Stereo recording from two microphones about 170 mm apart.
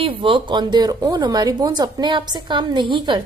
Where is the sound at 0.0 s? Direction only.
30° right (ahead or behind).